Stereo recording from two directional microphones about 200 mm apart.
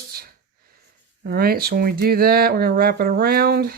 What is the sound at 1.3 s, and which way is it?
Speech, 50° right (ahead or behind).